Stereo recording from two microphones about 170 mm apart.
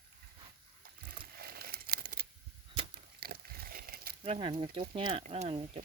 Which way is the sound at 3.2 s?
60° right (ahead or behind).